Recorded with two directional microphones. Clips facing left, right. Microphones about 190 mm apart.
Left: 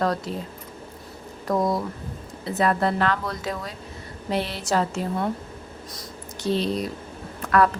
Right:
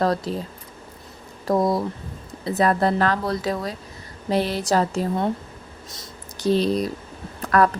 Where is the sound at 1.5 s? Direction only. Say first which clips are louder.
Right 3 dB; 35° right (ahead or behind).